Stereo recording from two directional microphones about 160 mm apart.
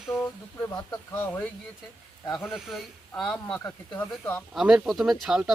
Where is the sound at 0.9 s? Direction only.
10° left (ahead or behind).